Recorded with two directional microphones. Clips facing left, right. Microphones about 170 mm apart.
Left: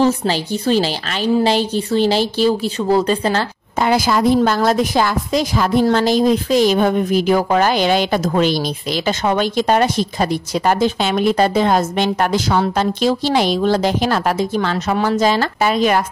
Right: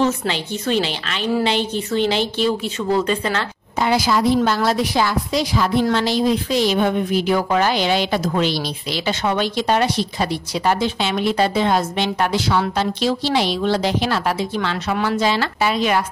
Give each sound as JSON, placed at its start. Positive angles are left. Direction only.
{"t": 0.0, "sound": "a woman's voice", "side_deg": 35}
{"t": 3.8, "sound": "a woman's voice", "side_deg": 50}